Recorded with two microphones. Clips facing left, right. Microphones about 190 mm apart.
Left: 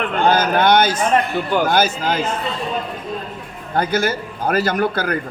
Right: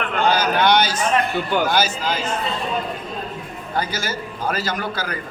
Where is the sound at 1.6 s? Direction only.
55° left (ahead or behind).